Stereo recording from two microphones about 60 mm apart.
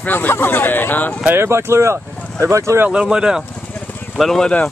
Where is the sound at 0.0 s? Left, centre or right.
Left.